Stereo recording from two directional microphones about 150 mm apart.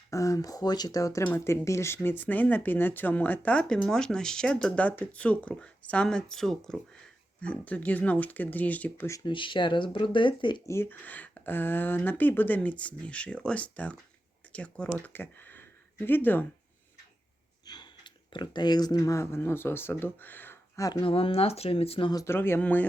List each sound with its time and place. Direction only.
0.1 s speech: 20° left (ahead or behind)
9.2 s speech: 35° left (ahead or behind)
10.7 s speech: 15° left (ahead or behind)
17.7 s speech: 30° left (ahead or behind)
21.0 s speech: 35° left (ahead or behind)
22.1 s speech: 20° left (ahead or behind)